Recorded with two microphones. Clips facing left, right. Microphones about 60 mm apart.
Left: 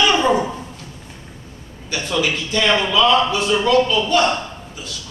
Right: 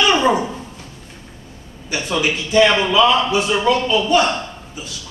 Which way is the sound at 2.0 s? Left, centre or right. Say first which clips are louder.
Even; centre.